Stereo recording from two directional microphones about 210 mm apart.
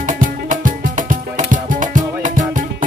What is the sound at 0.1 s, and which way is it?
Music, 40° right (ahead or behind).